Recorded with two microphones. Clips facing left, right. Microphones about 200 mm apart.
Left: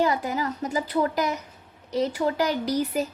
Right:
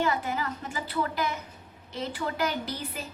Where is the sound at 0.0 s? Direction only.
40° left (ahead or behind).